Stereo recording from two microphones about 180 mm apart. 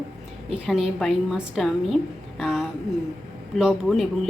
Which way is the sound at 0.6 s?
Centre (ahead or behind).